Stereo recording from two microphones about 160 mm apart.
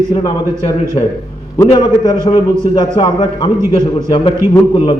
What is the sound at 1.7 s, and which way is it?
A man's voice, 25° left (ahead or behind).